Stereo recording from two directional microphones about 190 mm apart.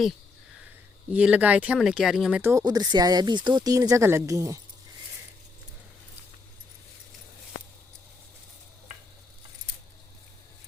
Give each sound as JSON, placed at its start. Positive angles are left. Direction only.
{"t": 1.1, "sound": "speech", "side_deg": -5}
{"t": 2.4, "sound": "speech", "side_deg": -15}